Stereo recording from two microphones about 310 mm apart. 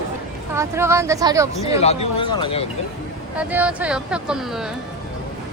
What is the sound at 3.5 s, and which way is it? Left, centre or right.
Speech, centre.